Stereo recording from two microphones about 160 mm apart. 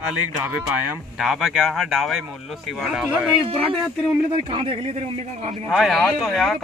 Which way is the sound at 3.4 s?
35° right (ahead or behind).